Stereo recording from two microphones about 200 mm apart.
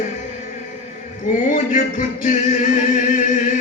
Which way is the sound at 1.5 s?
40° left (ahead or behind).